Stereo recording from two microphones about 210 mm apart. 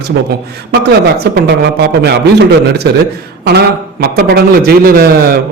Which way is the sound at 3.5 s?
50° right (ahead or behind).